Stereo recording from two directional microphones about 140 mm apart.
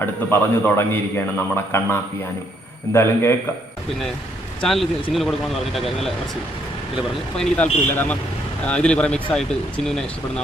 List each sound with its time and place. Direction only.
0.0 s a man's voice: 15° left (ahead or behind)
4.6 s speech: centre (ahead or behind)
7.3 s a man's voice: 10° left (ahead or behind)